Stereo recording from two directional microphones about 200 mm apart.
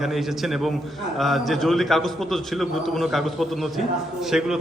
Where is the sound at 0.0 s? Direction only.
Centre (ahead or behind).